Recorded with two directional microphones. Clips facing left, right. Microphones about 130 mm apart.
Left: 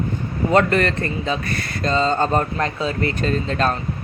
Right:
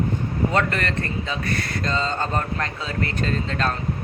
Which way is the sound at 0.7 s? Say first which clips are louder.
Left 6 dB; 20° left (ahead or behind).